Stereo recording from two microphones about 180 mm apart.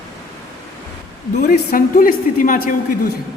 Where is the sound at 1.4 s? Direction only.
50° left (ahead or behind).